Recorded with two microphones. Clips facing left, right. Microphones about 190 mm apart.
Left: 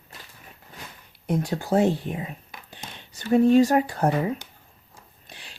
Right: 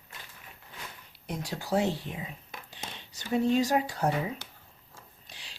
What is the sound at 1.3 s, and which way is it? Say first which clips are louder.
Speech: left 7 dB; 55° left (ahead or behind).